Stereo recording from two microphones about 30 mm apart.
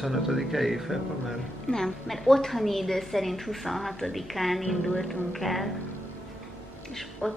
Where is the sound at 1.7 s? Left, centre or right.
Left.